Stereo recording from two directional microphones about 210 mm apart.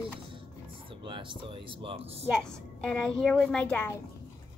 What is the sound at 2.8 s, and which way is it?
A child's voice, 5° left (ahead or behind).